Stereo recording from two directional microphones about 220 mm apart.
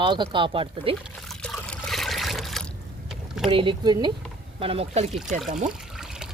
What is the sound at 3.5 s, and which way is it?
Speech, 20° right (ahead or behind).